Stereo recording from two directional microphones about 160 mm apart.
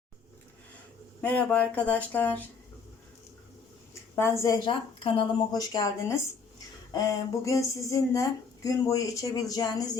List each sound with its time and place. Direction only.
1.2 s speech: 10° left (ahead or behind)
4.4 s speech: 25° left (ahead or behind)